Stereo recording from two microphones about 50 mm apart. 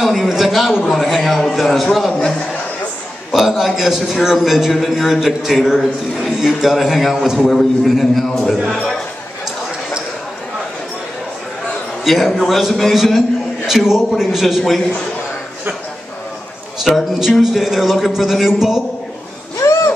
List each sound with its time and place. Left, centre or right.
0.0 s a man's voice: centre
3.3 s a man's voice: centre
12.0 s a man's voice: centre
16.9 s a man's voice: centre